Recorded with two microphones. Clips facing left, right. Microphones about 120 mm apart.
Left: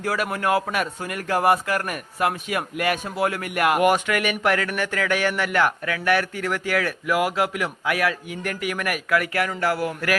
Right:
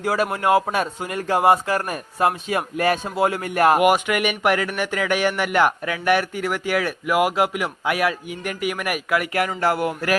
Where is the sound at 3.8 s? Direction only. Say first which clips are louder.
Right 2 dB; 10° right (ahead or behind).